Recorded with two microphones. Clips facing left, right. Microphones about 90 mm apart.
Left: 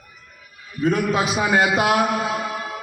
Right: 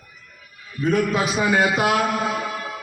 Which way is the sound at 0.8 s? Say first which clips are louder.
Even; 15° left (ahead or behind).